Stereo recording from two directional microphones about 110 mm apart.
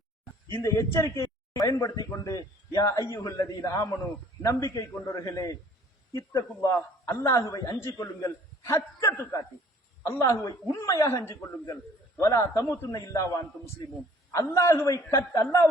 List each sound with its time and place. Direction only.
0.6 s a man's voice: 25° left (ahead or behind)